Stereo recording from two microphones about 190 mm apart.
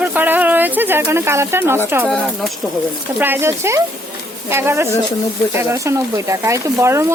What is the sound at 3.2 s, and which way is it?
Speech, 10° right (ahead or behind).